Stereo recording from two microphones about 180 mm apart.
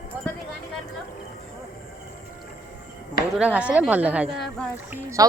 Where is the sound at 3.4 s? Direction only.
5° right (ahead or behind).